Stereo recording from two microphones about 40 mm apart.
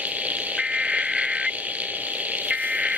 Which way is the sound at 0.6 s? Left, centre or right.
Centre.